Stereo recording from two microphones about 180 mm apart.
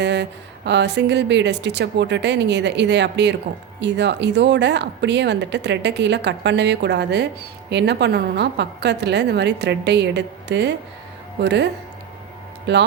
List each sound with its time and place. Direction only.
0.0 s speech: 75° right (ahead or behind)